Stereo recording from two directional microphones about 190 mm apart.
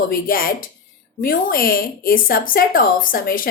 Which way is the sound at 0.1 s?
50° left (ahead or behind).